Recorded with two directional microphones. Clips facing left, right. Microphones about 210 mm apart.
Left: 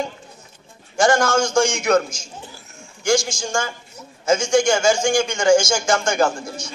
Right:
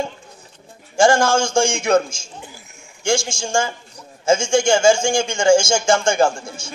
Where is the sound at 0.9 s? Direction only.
25° right (ahead or behind).